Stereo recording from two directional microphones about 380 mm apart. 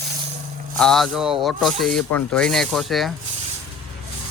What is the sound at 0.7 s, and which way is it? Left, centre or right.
Speech, centre.